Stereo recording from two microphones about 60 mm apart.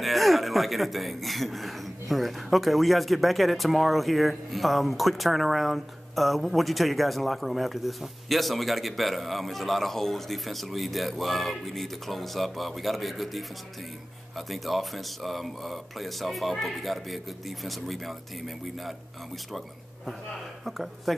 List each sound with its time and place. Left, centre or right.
0.0 s speech: centre
20.6 s speech: centre